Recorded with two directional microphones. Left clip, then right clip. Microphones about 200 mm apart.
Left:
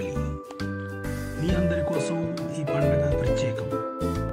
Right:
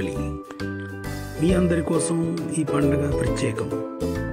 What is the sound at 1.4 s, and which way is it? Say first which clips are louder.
Speech: right 4 dB; 20° right (ahead or behind).